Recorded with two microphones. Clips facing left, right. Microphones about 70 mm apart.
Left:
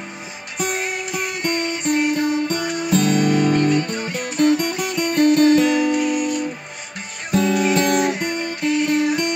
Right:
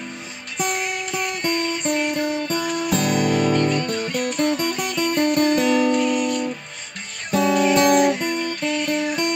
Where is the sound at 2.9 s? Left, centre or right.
Centre.